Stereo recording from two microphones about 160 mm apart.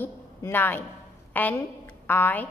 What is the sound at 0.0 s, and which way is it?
A woman's voice, 15° left (ahead or behind).